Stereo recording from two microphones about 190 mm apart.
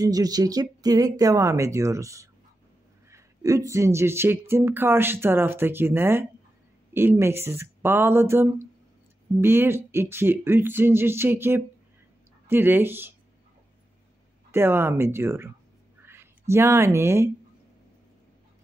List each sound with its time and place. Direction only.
0.0 s speech: 20° right (ahead or behind)
14.5 s speech: 10° right (ahead or behind)